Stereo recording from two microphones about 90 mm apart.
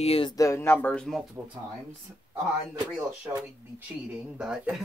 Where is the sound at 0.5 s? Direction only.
20° left (ahead or behind).